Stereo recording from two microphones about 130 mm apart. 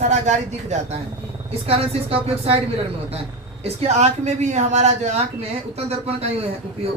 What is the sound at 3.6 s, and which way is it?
Speech, 55° right (ahead or behind).